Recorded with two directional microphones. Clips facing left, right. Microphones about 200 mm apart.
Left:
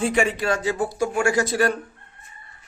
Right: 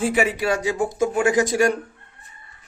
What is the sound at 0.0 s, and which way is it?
Speech, 5° right (ahead or behind).